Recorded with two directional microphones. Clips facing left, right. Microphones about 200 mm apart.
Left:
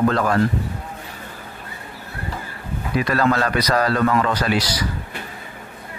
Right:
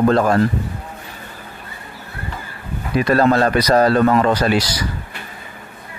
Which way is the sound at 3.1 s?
30° right (ahead or behind).